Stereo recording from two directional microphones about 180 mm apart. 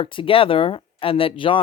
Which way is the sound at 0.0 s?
30° left (ahead or behind).